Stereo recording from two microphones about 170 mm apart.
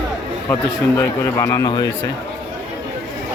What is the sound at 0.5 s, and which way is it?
A man's voice, 15° left (ahead or behind).